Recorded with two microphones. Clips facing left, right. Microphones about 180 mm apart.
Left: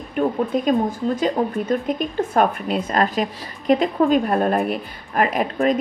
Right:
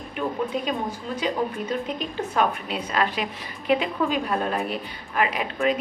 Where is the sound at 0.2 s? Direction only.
45° left (ahead or behind).